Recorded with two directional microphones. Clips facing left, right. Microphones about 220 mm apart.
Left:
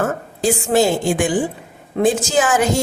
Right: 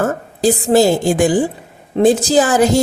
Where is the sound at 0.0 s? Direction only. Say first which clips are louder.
Right 4 dB; 35° right (ahead or behind).